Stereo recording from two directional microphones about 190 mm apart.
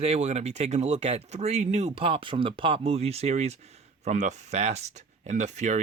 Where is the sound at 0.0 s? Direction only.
35° right (ahead or behind).